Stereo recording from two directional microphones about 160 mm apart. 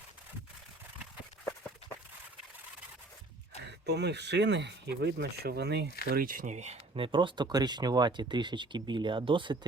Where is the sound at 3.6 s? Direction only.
90° right.